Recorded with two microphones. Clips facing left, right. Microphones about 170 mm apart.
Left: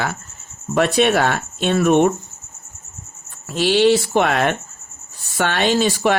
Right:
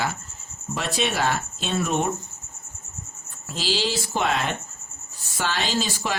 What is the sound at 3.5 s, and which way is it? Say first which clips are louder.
Speech: left 12 dB; 60° left (ahead or behind).